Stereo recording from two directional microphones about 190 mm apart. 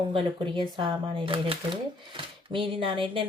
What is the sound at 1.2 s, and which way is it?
Speech, 30° right (ahead or behind).